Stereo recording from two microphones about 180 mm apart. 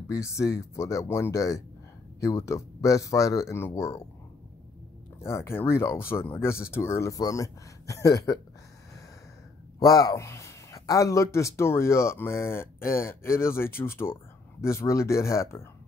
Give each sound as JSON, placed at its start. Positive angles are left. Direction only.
{"t": 0.1, "sound": "speech", "side_deg": 15}
{"t": 5.2, "sound": "speech", "side_deg": 15}
{"t": 9.8, "sound": "speech", "side_deg": 20}